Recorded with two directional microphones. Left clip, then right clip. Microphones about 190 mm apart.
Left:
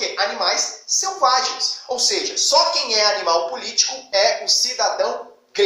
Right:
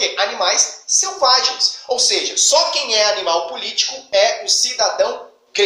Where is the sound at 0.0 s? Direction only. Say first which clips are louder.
Right 3 dB; 25° left (ahead or behind).